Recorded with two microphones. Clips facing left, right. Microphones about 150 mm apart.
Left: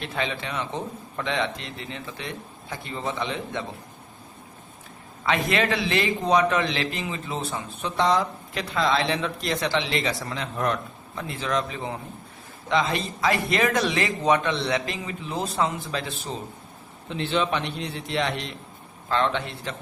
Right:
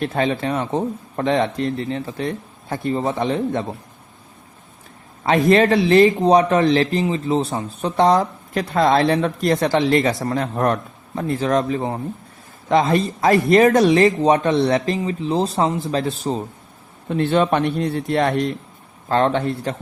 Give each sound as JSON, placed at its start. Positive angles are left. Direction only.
{"t": 0.0, "sound": "speech", "side_deg": -45}
{"t": 5.5, "sound": "a man's voice", "side_deg": -40}
{"t": 17.1, "sound": "speech", "side_deg": -50}